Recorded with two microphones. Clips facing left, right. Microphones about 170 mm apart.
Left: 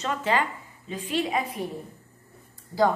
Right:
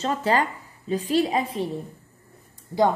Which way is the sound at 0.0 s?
35° right (ahead or behind).